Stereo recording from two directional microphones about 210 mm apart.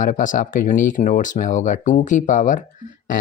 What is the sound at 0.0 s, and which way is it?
Speech, 40° left (ahead or behind).